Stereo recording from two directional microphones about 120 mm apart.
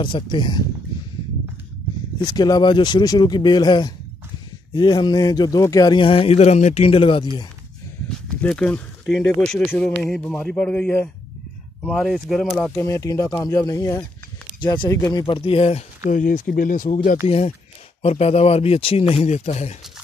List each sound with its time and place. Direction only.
0.0 s speech: 40° left (ahead or behind)
2.1 s a man's voice: 35° left (ahead or behind)
8.4 s a man's voice: 10° left (ahead or behind)
12.7 s speech: 25° left (ahead or behind)
14.6 s speech: 40° left (ahead or behind)
14.9 s speech: 30° left (ahead or behind)
15.2 s a man's voice: 50° left (ahead or behind)
16.6 s speech: 90° left
17.3 s speech: 60° left (ahead or behind)
19.1 s speech: 75° left (ahead or behind)